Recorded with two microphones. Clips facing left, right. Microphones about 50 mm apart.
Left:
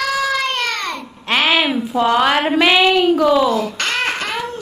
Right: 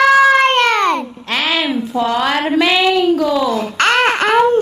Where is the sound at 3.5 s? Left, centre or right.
Right.